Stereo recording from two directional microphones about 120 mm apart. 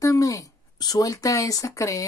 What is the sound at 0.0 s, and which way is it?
Speech, 30° left (ahead or behind).